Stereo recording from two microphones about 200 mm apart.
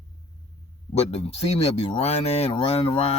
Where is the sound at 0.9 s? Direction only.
30° left (ahead or behind).